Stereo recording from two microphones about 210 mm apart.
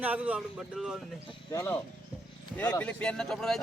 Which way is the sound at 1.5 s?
15° left (ahead or behind).